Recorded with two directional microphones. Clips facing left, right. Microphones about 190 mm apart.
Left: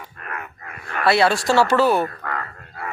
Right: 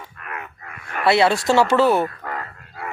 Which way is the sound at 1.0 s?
20° right (ahead or behind).